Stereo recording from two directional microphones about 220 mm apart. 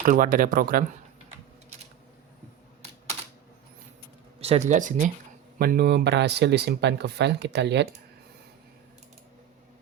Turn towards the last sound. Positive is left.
turn(degrees=-50)  # may be behind; listen again after turning